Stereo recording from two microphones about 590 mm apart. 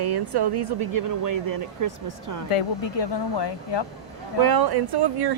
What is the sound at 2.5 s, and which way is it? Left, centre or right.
Speech, left.